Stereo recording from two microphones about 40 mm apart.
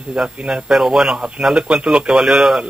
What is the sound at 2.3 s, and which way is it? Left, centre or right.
Speech, centre.